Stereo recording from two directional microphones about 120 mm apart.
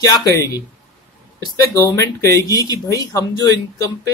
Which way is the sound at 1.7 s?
30° left (ahead or behind).